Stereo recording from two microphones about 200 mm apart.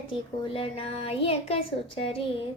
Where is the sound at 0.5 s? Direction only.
30° left (ahead or behind).